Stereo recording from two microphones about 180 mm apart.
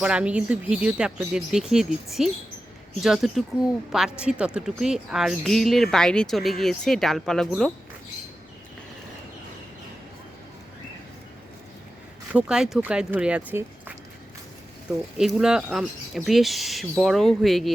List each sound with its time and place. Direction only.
0.0 s speech: 5° right (ahead or behind)
12.3 s speech: 5° right (ahead or behind)
15.4 s speech: 5° right (ahead or behind)